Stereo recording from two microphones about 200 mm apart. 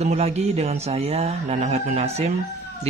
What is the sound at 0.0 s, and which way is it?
A man's voice, 30° right (ahead or behind).